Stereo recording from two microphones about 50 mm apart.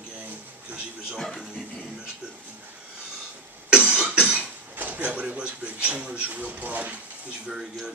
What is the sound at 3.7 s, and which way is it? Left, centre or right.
Cough, right.